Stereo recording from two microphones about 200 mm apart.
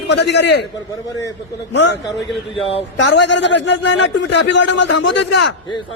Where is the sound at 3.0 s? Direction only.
65° left (ahead or behind).